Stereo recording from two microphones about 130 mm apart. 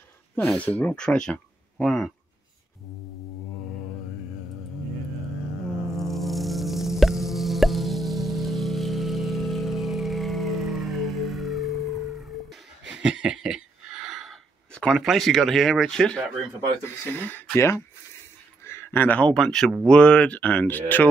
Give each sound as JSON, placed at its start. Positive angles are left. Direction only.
{"t": 0.5, "sound": "speech", "side_deg": 10}
{"t": 5.9, "sound": "music", "side_deg": 0}
{"t": 16.8, "sound": "speech", "side_deg": 15}